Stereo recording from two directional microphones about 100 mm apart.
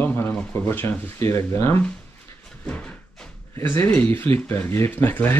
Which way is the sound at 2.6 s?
10° left (ahead or behind).